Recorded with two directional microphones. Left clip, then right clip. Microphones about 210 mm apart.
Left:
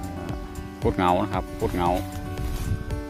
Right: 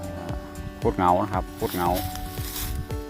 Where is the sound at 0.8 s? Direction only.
10° left (ahead or behind).